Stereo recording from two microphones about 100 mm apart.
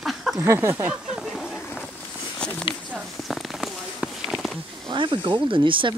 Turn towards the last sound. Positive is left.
turn(degrees=-55)  # may be behind; listen again after turning